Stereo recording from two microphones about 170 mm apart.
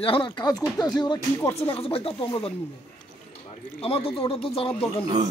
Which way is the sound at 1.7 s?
35° left (ahead or behind).